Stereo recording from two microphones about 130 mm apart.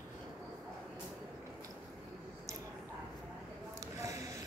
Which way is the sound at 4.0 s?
25° right (ahead or behind).